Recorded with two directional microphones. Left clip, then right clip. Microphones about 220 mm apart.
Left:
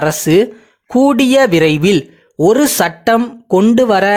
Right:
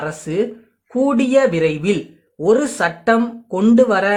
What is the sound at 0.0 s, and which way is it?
Speech, 40° left (ahead or behind).